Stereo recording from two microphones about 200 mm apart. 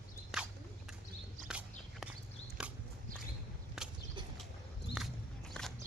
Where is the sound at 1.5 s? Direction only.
5° right (ahead or behind).